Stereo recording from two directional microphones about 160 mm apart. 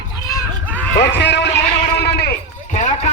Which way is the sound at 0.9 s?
90° left.